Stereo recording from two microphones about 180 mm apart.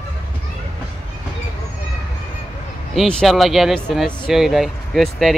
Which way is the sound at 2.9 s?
Centre (ahead or behind).